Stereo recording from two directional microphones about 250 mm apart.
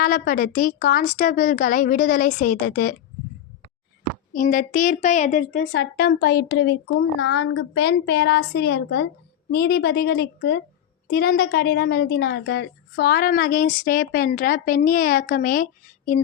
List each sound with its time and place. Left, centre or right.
0.0 s a woman's voice: left
4.3 s a woman's voice: left